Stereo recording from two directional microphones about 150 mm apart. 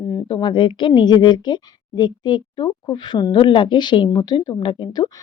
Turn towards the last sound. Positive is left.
turn(degrees=30)  # may be behind; listen again after turning